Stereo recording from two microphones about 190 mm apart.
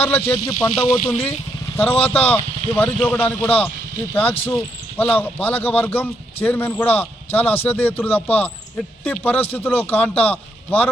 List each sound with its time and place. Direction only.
0.0 s speech: 10° left (ahead or behind)
0.7 s speech: 30° left (ahead or behind)
1.7 s speech: 10° left (ahead or behind)